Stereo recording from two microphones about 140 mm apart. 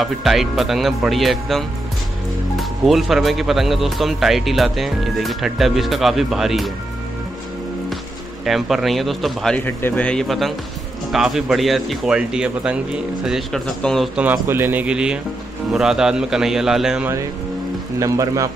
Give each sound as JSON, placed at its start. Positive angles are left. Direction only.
{"t": 0.0, "sound": "speech", "side_deg": 0}
{"t": 8.5, "sound": "speech", "side_deg": 0}
{"t": 9.7, "sound": "speech", "side_deg": 15}
{"t": 17.9, "sound": "a man's voice", "side_deg": -25}